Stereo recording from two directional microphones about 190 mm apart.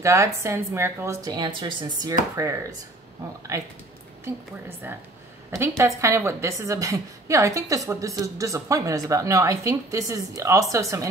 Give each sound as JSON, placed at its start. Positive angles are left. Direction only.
{"t": 0.0, "sound": "a woman's voice", "side_deg": -15}